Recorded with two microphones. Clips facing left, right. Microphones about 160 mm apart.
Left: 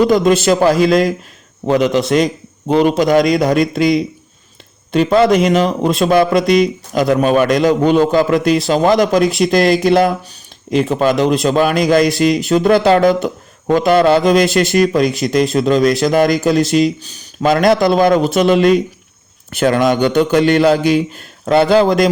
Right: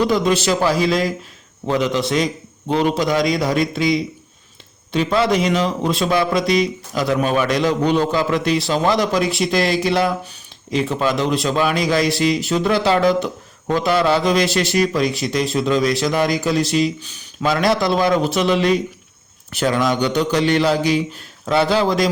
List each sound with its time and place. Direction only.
0.1 s a man's voice: 50° left (ahead or behind)